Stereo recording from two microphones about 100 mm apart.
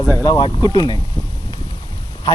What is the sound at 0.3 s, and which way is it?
Speech, 45° left (ahead or behind).